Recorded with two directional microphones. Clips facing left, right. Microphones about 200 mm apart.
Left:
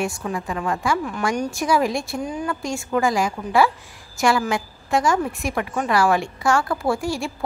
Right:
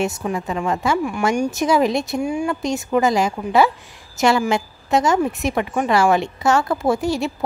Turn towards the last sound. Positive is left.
turn(degrees=-20)  # may be behind; listen again after turning